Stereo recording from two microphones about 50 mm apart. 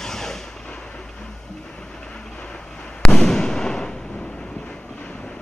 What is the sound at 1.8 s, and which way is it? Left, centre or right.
Fireworks, centre.